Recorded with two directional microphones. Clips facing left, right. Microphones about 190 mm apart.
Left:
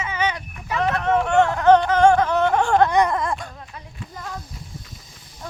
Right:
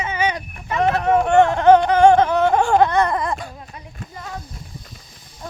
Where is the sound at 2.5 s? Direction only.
10° right (ahead or behind).